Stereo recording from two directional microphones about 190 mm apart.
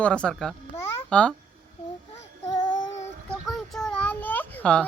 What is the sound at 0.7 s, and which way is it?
Babbling, 10° left (ahead or behind).